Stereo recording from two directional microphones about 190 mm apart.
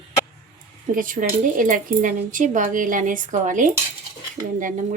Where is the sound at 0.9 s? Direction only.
45° right (ahead or behind).